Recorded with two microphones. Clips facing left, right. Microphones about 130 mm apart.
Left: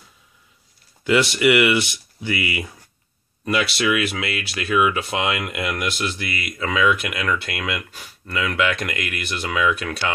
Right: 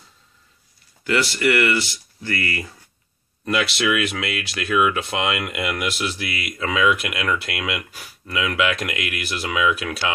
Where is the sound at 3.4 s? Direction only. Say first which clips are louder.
Even; centre (ahead or behind).